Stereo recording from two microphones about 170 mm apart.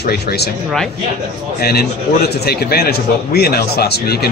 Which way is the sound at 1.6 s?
65° left (ahead or behind).